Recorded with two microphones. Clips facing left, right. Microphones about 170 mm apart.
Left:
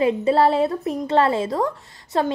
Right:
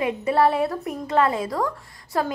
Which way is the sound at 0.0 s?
25° left (ahead or behind).